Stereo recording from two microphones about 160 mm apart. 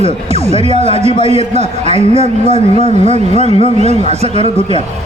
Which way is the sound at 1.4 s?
45° right (ahead or behind).